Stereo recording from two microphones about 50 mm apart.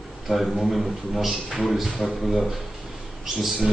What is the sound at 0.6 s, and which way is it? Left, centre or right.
Speech, centre.